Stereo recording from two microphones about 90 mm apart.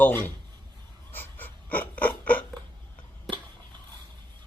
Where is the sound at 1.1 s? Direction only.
20° left (ahead or behind).